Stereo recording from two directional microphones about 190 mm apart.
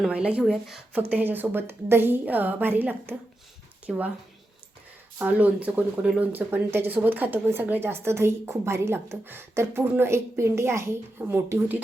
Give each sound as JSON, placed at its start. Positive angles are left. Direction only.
{"t": 0.0, "sound": "speech", "side_deg": -5}
{"t": 5.2, "sound": "speech", "side_deg": -5}